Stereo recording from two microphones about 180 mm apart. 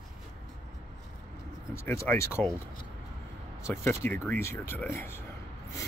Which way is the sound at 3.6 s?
15° left (ahead or behind).